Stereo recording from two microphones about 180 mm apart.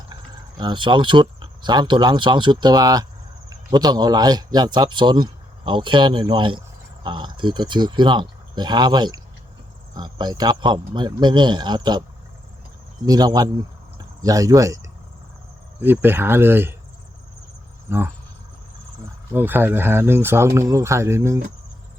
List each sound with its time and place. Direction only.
0.1 s a man's voice: 25° right (ahead or behind)
13.1 s a man's voice: 20° right (ahead or behind)
17.8 s speech: 15° right (ahead or behind)
19.3 s speech: 10° right (ahead or behind)